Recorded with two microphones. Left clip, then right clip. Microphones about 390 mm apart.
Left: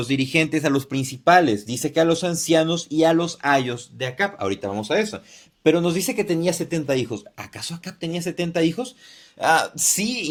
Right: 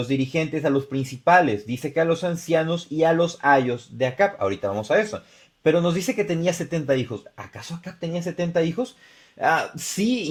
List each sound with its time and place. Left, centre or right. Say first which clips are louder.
0.1 s speech: left 6 dB; centre
1.2 s speech: left 1 dB; centre
4.8 s speech: right 2 dB; right
6.8 s speech: right 3 dB; centre